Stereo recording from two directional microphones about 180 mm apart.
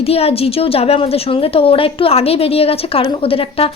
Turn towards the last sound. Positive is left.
turn(degrees=30)  # may be behind; listen again after turning